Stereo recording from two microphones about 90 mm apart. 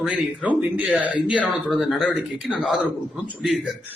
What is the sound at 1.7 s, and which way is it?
Speech, 5° right (ahead or behind).